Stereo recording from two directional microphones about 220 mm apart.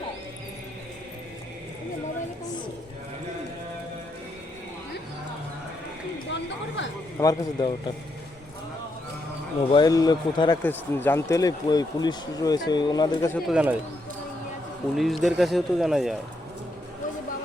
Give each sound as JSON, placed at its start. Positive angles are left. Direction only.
{"t": 6.3, "sound": "a sound", "side_deg": 55}
{"t": 7.2, "sound": "speech", "side_deg": 15}
{"t": 9.7, "sound": "speech", "side_deg": 15}
{"t": 10.6, "sound": "speech", "side_deg": 10}
{"t": 13.5, "sound": "speech", "side_deg": -5}
{"t": 14.9, "sound": "speech", "side_deg": 0}